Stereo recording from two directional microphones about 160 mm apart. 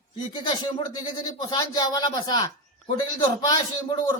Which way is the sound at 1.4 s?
25° left (ahead or behind).